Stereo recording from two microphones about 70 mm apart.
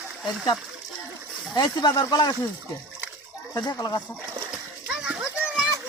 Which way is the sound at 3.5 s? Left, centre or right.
Left.